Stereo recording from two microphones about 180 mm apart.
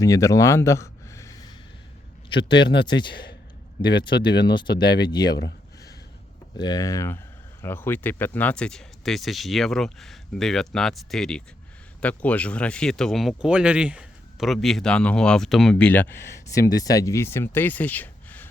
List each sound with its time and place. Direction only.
0.0 s a man's voice: 20° left (ahead or behind)
6.6 s a man's voice: 20° left (ahead or behind)